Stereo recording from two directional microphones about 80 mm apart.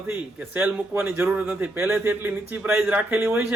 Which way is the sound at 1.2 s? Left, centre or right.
Centre.